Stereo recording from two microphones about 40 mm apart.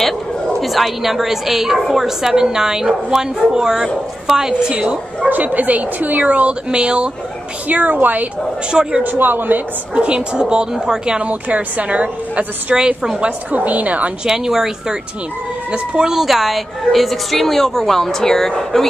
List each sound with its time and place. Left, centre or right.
0.0 s speech: centre
4.7 s a woman's voice: right
5.3 s speech: right
6.7 s a woman's voice: right
7.6 s speech: right
9.9 s a woman's voice: right
11.1 s a woman's voice: right
12.8 s speech: centre
13.5 s speech: right
14.2 s speech: centre
16.0 s a woman's voice: centre